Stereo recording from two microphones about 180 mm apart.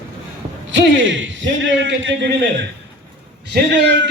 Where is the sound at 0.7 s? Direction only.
90° right.